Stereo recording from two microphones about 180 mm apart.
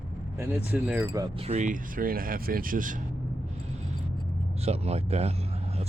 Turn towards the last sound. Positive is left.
turn(degrees=-35)  # may be behind; listen again after turning